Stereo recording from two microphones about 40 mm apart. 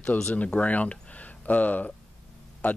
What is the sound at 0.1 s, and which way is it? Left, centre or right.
Speech, left.